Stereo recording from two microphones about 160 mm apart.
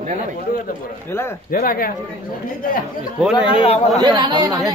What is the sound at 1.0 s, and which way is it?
Speech, 15° left (ahead or behind).